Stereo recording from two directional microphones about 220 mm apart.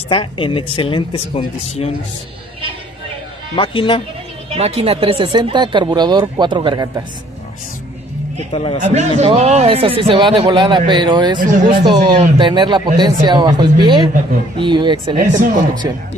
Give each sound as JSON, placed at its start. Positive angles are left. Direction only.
{"t": 0.1, "sound": "speech", "side_deg": 20}
{"t": 3.5, "sound": "speech", "side_deg": 25}
{"t": 4.5, "sound": "speech", "side_deg": -25}
{"t": 8.8, "sound": "speech", "side_deg": -30}